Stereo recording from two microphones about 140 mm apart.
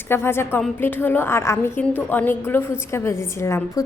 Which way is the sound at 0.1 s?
15° left (ahead or behind).